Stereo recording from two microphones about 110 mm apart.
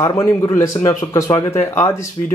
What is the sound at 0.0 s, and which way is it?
A man's voice, 30° left (ahead or behind).